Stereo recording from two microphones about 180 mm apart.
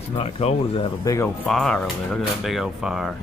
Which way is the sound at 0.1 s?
35° left (ahead or behind).